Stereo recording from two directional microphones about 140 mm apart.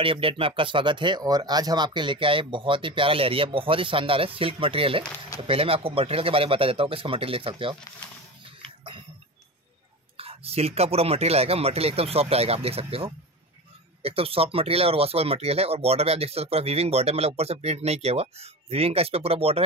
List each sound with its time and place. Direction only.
0.0 s speech: 40° right (ahead or behind)
10.1 s speech: 45° right (ahead or behind)